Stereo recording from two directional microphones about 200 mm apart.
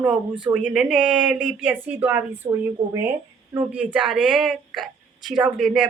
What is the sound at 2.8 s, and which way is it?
Speech, 20° right (ahead or behind).